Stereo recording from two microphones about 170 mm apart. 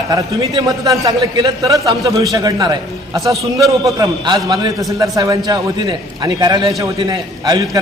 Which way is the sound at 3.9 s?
25° right (ahead or behind).